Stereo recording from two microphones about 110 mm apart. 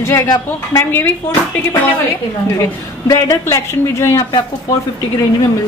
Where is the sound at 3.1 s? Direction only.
30° left (ahead or behind).